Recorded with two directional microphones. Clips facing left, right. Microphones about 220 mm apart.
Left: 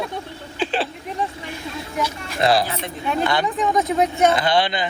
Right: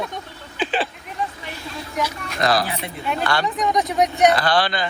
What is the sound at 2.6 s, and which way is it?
Speech, 15° right (ahead or behind).